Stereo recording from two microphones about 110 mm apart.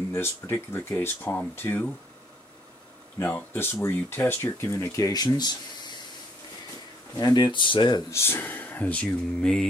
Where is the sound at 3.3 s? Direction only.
20° left (ahead or behind); by 5.6 s 40° left (ahead or behind).